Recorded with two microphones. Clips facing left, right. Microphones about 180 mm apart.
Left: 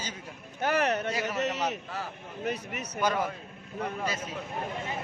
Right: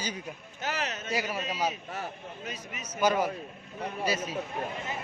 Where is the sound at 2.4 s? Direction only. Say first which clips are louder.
Left 10 dB; 65° left (ahead or behind).